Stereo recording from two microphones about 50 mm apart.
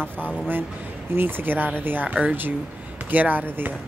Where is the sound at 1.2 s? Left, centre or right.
Right.